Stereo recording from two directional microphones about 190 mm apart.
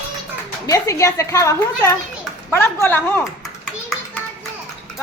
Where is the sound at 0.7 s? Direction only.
15° left (ahead or behind).